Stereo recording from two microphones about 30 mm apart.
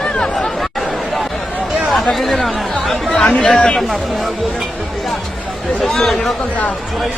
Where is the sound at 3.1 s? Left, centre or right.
Left.